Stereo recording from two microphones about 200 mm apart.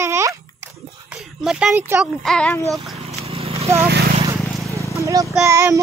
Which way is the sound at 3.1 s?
30° right (ahead or behind).